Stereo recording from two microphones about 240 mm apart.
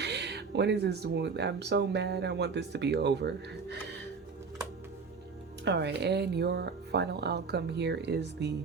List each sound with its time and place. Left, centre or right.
0.0 s speech: right
5.6 s speech: right